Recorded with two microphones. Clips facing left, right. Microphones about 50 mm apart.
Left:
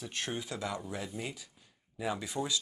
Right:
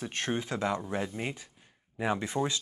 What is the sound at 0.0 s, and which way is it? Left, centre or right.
Speech, right.